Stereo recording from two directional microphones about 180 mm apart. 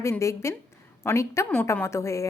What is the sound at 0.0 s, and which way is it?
A woman's voice, 15° left (ahead or behind).